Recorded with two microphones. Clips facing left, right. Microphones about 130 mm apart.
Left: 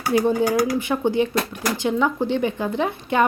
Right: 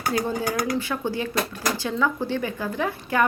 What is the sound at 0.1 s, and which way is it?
A woman's voice, 20° left (ahead or behind).